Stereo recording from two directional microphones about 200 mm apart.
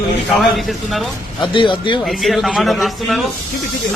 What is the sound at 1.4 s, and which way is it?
Speech, 25° left (ahead or behind).